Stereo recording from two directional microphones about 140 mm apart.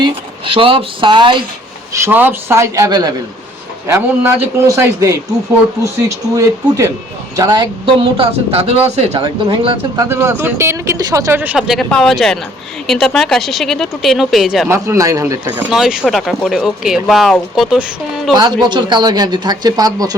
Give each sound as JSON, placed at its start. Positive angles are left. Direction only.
{"t": 0.0, "sound": "speech", "side_deg": -40}
{"t": 1.9, "sound": "speech", "side_deg": -15}
{"t": 3.8, "sound": "speech", "side_deg": -15}
{"t": 9.2, "sound": "speech", "side_deg": -35}
{"t": 11.5, "sound": "speech", "side_deg": 0}
{"t": 14.7, "sound": "speech", "side_deg": -20}
{"t": 15.7, "sound": "speech", "side_deg": -5}
{"t": 18.6, "sound": "speech", "side_deg": -35}